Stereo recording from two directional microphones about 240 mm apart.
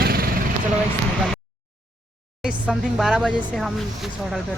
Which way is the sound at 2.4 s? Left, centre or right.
Centre.